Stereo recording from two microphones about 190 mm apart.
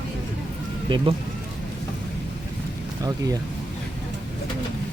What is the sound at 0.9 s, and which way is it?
Speech, 25° right (ahead or behind).